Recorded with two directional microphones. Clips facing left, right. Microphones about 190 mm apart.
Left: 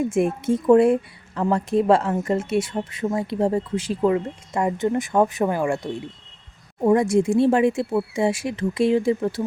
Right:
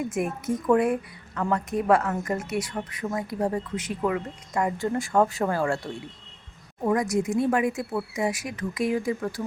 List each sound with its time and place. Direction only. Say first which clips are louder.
0.0 s speech: left 7 dB; 30° left (ahead or behind)
6.8 s speech: left 6 dB; 25° left (ahead or behind)